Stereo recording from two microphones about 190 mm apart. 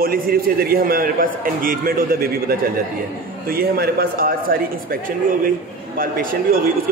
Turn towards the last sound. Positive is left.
turn(degrees=-50)  # may be behind; listen again after turning